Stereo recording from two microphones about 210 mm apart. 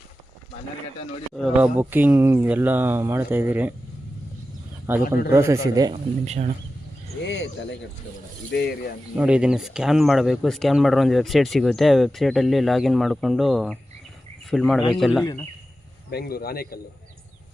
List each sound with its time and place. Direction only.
1.4 s speech: centre (ahead or behind)
1.8 s speech: 10° right (ahead or behind)
4.9 s speech: 10° right (ahead or behind)
6.2 s speech: 30° right (ahead or behind)
7.3 s a man's voice: 60° left (ahead or behind)
9.1 s speech: 5° right (ahead or behind)
15.2 s a man's voice: 15° left (ahead or behind)
16.0 s a man's voice: 50° left (ahead or behind)